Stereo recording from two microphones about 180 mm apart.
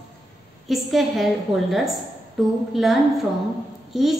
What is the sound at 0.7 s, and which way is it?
A woman's voice, centre (ahead or behind).